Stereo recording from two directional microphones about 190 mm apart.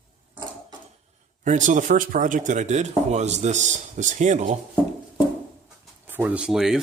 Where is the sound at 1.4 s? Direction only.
40° right (ahead or behind).